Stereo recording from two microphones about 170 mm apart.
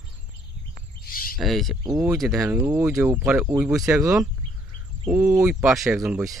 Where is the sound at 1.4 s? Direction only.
Centre (ahead or behind).